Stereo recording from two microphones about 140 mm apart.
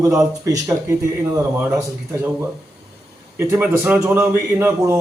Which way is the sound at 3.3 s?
15° right (ahead or behind).